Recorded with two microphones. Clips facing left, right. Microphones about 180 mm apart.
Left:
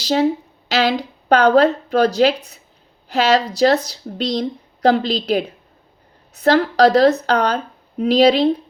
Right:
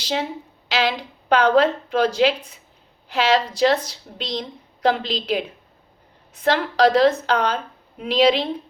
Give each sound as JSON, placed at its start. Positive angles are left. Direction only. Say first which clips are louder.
{"t": 0.0, "sound": "a woman's voice", "louder": "left 9 dB", "side_deg": 40}